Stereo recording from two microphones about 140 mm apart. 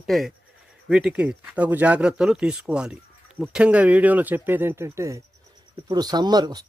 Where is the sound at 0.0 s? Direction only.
Centre (ahead or behind).